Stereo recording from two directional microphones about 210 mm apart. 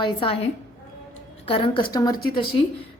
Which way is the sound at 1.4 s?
25° left (ahead or behind).